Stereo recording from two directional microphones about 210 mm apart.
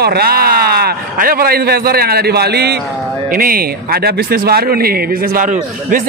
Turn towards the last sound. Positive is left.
turn(degrees=-40)  # may be behind; listen again after turning